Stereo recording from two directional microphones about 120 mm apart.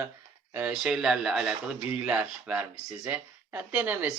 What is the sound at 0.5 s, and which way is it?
Speech, 10° right (ahead or behind).